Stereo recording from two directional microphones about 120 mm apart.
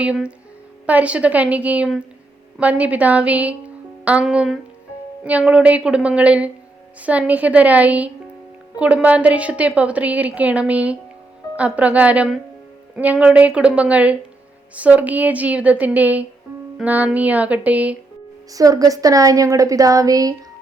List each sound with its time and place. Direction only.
0.0 s a woman's voice: 10° right (ahead or behind)
18.5 s speech: 30° right (ahead or behind)